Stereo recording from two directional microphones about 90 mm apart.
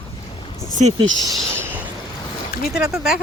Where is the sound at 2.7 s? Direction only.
5° right (ahead or behind).